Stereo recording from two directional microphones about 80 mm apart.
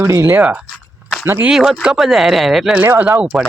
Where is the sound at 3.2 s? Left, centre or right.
Centre.